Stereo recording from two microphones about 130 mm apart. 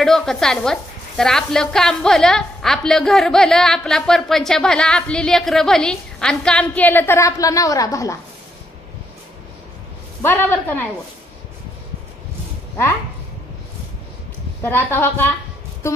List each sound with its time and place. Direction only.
0.0 s a woman's voice: 5° left (ahead or behind); by 8.2 s 25° left (ahead or behind)
10.2 s a woman's voice: 15° left (ahead or behind)
14.6 s a woman's voice: 20° left (ahead or behind)